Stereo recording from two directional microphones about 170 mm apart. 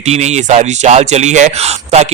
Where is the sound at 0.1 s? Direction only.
40° right (ahead or behind).